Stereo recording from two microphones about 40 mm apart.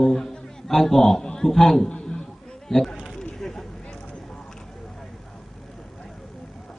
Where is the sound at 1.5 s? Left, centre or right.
Centre.